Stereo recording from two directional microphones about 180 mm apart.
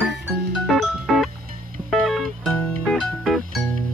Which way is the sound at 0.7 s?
Centre (ahead or behind).